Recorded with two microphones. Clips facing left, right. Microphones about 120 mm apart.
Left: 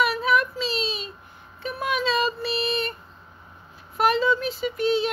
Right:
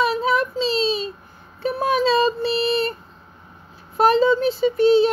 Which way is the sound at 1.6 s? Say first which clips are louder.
Right 7 dB; 35° right (ahead or behind).